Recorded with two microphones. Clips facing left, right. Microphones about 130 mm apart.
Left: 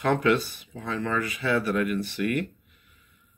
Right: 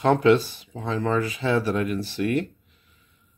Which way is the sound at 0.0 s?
30° right (ahead or behind).